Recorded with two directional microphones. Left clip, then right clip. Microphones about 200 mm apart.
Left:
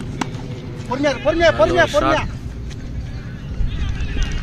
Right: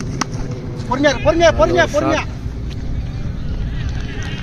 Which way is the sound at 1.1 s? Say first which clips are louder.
Right 1 dB; 30° left (ahead or behind).